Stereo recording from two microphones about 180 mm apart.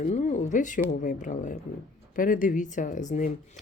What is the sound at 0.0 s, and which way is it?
Speech, 45° left (ahead or behind).